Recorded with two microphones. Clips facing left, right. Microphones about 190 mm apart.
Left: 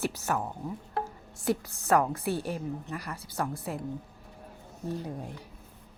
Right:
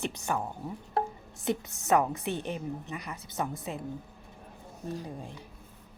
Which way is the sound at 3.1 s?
20° right (ahead or behind).